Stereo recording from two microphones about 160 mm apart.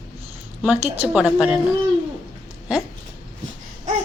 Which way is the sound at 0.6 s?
10° right (ahead or behind).